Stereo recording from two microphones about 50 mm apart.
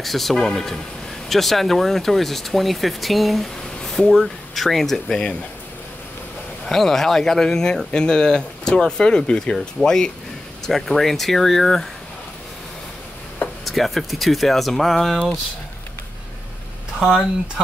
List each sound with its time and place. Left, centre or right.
0.0 s speech: centre
3.8 s a sound: centre
4.1 s speech: centre
6.6 s speech: centre
13.7 s speech: centre